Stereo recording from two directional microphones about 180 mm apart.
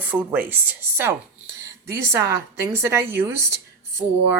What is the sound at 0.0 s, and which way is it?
Speech, 10° right (ahead or behind).